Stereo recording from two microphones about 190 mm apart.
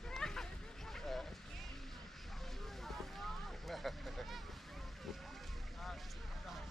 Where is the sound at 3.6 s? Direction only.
Centre (ahead or behind).